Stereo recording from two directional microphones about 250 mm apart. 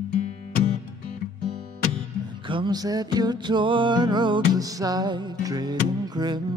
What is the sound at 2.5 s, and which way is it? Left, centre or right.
Music, centre.